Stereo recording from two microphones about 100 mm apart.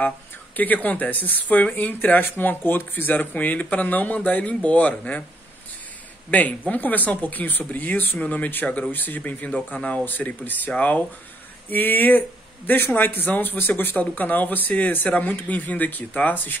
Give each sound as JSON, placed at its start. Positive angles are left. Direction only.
{"t": 0.6, "sound": "speech", "side_deg": 15}
{"t": 6.3, "sound": "speech", "side_deg": 15}